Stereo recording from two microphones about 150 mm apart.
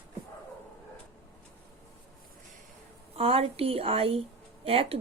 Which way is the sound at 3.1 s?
40° right (ahead or behind).